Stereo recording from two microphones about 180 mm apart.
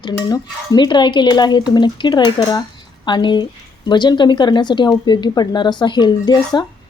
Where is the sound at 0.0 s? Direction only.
20° left (ahead or behind).